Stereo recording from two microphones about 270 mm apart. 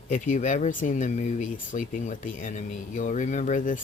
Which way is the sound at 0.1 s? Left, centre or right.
Left.